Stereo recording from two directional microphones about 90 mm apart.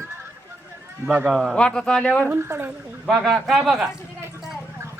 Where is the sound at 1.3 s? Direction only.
Centre (ahead or behind).